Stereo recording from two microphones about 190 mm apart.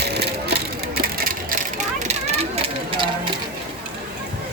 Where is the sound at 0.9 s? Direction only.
50° right (ahead or behind).